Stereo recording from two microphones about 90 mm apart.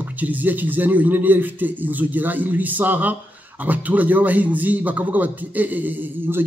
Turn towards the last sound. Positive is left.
turn(degrees=-20)  # may be behind; listen again after turning